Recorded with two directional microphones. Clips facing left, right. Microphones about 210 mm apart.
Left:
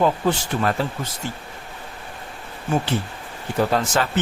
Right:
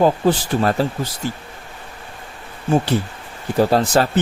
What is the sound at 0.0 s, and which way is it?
Speech, 35° right (ahead or behind).